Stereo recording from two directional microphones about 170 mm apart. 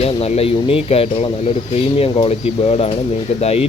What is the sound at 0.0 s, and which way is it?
Speech, 35° left (ahead or behind).